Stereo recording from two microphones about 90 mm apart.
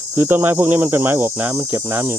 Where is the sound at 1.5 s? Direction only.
35° right (ahead or behind).